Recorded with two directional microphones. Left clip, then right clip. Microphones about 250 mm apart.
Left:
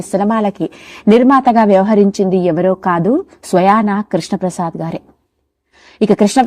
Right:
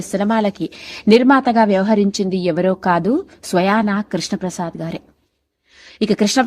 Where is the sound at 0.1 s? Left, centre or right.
Centre.